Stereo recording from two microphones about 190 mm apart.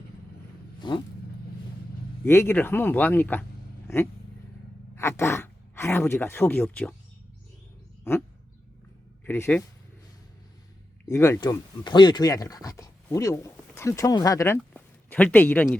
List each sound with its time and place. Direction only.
0.8 s vehicle: 25° left (ahead or behind)
2.2 s speech: 15° left (ahead or behind)
9.2 s speech: 10° left (ahead or behind)
11.1 s speech: 15° left (ahead or behind)